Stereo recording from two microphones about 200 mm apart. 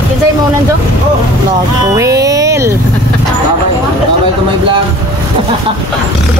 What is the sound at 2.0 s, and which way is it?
Music, 15° right (ahead or behind).